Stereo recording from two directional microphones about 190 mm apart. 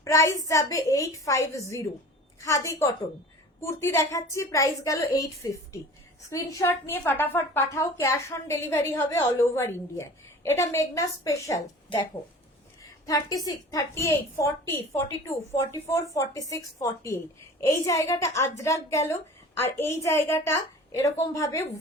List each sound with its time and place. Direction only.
0.0 s a woman's voice: 15° left (ahead or behind)